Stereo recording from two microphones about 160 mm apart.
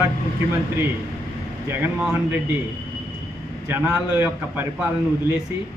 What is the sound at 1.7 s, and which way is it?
Speech, 15° right (ahead or behind).